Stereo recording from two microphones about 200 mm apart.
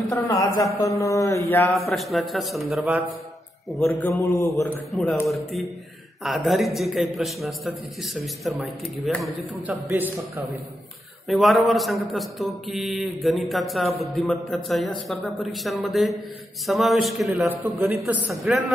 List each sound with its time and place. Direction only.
0.1 s mantra: 15° left (ahead or behind)
1.9 s a man's voice: centre (ahead or behind)
3.8 s mantra: 15° left (ahead or behind)
4.9 s a man's voice: 5° left (ahead or behind)
11.2 s a man's voice: centre (ahead or behind)